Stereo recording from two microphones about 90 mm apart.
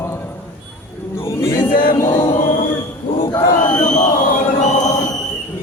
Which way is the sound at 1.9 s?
35° left (ahead or behind).